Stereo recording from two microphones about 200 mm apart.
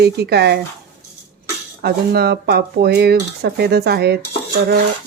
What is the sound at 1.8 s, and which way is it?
Speech, 50° right (ahead or behind).